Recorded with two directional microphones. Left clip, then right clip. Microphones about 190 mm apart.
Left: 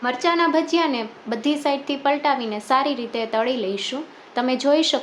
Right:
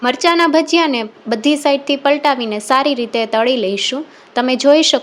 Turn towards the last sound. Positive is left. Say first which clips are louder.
# right 8 dB
turn(degrees=-35)  # may be behind; listen again after turning